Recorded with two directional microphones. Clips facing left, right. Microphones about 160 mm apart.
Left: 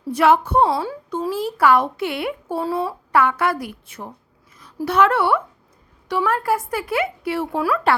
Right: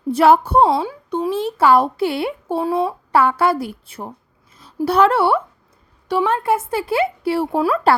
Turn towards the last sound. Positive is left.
turn(degrees=-30)  # may be behind; listen again after turning